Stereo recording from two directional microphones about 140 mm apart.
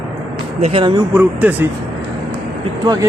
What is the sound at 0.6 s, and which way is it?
Speech, 40° right (ahead or behind).